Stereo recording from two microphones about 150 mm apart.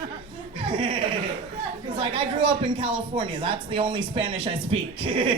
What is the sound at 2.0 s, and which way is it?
Speech, 35° right (ahead or behind).